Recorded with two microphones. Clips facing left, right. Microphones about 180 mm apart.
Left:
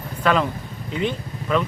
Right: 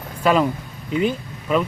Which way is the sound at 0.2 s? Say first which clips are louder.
Right 3 dB; 10° right (ahead or behind).